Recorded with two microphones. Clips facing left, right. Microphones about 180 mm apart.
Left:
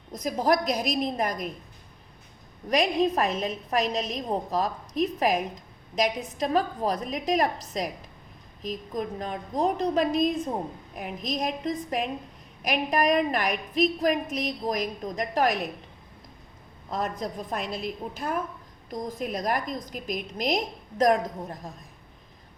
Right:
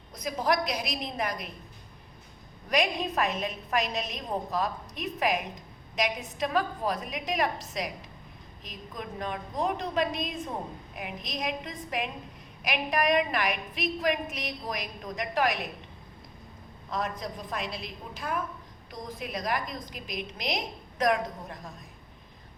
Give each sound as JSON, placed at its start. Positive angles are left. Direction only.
{"t": 0.2, "sound": "a woman's voice", "side_deg": 45}
{"t": 2.6, "sound": "a woman's voice", "side_deg": 35}
{"t": 8.9, "sound": "a woman's voice", "side_deg": 40}
{"t": 17.5, "sound": "a woman's voice", "side_deg": 45}